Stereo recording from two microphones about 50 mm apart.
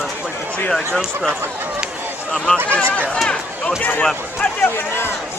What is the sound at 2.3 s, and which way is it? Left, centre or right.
Speech, left.